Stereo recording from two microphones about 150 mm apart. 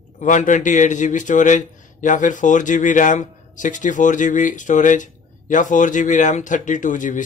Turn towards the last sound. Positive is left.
turn(degrees=60)  # may be behind; listen again after turning